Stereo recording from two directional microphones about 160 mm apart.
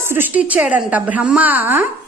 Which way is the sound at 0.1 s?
10° right (ahead or behind).